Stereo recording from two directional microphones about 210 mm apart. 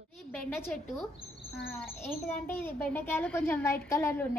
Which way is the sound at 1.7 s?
10° left (ahead or behind).